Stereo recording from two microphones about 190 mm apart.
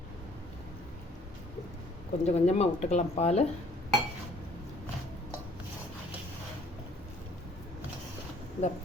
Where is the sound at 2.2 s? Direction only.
35° left (ahead or behind).